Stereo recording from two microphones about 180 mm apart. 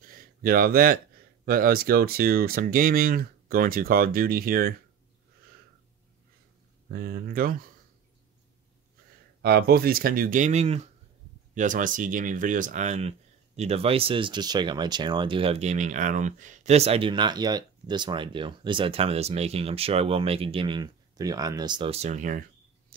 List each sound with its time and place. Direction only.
0.0 s a sound: 55° right (ahead or behind)
1.4 s speech: 55° right (ahead or behind)
6.9 s speech: 55° right (ahead or behind)
9.4 s speech: 60° right (ahead or behind); by 22.4 s 45° right (ahead or behind)